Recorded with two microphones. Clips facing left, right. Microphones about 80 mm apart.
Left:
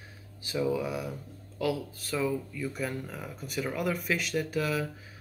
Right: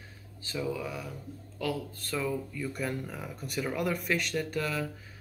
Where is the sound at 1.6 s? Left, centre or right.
Centre.